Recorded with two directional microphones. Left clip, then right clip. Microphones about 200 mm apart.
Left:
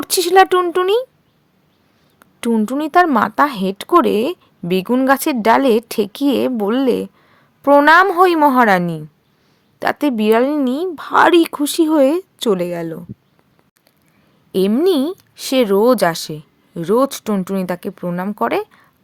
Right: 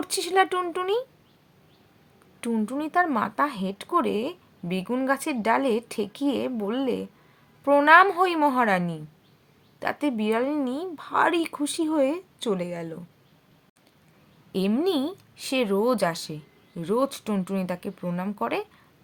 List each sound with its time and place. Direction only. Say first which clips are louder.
0.0 s speech: left 11 dB; 45° left (ahead or behind)
2.4 s speech: left 10 dB; 50° left (ahead or behind)
14.5 s speech: left 10 dB; 40° left (ahead or behind)